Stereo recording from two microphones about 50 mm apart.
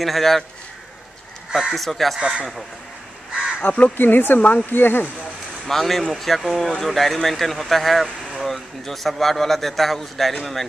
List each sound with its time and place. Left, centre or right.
0.0 s speech: centre
1.5 s speech: centre
2.1 s speech: centre
3.6 s speech: left
3.9 s speech: left
4.4 s speech: left
4.7 s speech: left
5.7 s speech: centre